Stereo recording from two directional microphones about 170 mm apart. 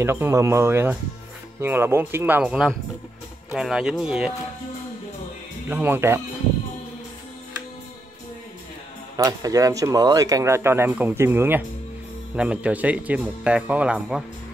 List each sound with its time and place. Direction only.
0.0 s speech: 15° right (ahead or behind)
5.7 s speech: 10° right (ahead or behind)
9.1 s speech: 20° right (ahead or behind); by 14.2 s 5° right (ahead or behind)